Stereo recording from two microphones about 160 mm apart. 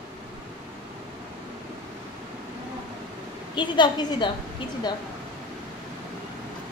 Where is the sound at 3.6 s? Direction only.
30° left (ahead or behind).